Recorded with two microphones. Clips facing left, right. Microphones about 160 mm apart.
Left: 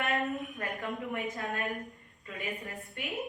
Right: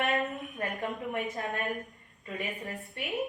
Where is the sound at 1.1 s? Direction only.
20° right (ahead or behind).